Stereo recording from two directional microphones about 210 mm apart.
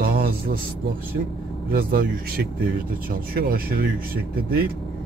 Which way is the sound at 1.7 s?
45° right (ahead or behind).